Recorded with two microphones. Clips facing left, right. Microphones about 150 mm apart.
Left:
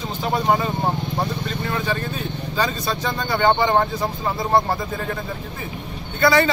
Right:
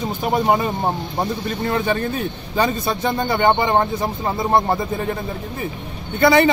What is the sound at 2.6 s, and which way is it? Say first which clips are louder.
A man's voice: right 4 dB; 20° right (ahead or behind).